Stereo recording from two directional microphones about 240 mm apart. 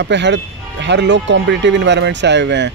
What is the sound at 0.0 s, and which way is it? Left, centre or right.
Speech, right.